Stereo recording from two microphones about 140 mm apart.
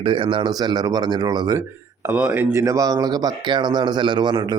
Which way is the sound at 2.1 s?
10° right (ahead or behind).